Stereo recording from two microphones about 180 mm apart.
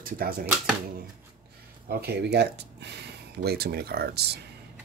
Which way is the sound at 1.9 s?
65° right (ahead or behind).